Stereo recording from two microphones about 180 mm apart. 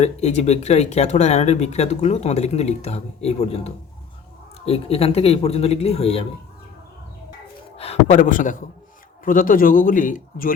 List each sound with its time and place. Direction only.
0.0 s speech: 40° left (ahead or behind)
7.8 s a man's voice: 40° left (ahead or behind)